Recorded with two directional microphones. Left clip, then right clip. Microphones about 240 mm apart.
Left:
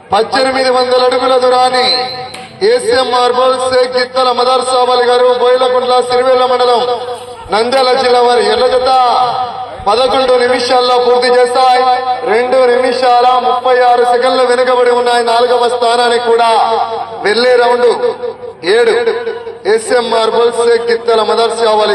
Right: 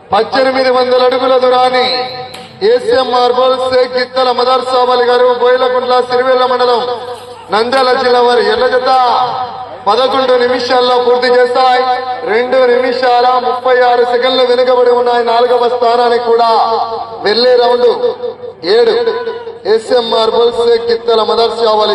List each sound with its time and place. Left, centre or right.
0.1 s a man's voice: left